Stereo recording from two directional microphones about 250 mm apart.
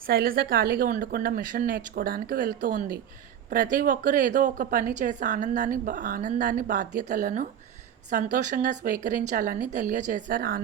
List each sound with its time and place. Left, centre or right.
0.0 s a woman's voice: right